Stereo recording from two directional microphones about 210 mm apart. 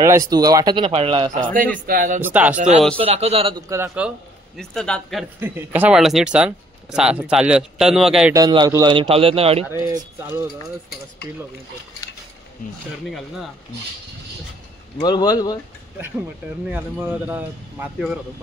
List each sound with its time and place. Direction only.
0.0 s speech: 15° right (ahead or behind)
1.9 s speech: 45° right (ahead or behind)
2.2 s speech: 5° right (ahead or behind)
2.5 s speech: 35° right (ahead or behind)
3.6 s speech: 15° right (ahead or behind)
4.6 s speech: 5° left (ahead or behind)
5.4 s speech: 10° right (ahead or behind)
8.3 s speech: 20° right (ahead or behind)
15.0 s speech: 20° left (ahead or behind)
16.6 s speech: 10° right (ahead or behind)